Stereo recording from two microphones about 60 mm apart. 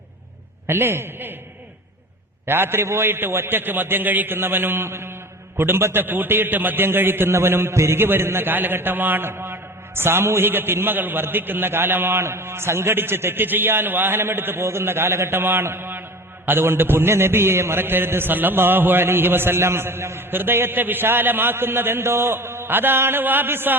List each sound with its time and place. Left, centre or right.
0.7 s a man's voice: right
2.5 s a man's voice: right